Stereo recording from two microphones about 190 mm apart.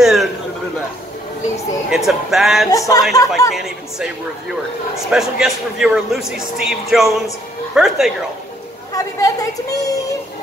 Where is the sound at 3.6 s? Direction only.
5° right (ahead or behind).